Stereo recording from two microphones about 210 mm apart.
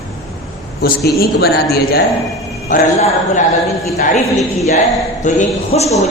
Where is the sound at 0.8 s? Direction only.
45° left (ahead or behind).